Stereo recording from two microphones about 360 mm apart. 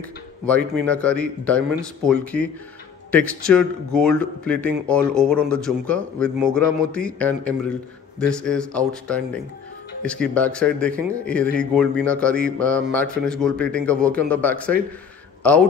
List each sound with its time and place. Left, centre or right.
0.5 s speech: centre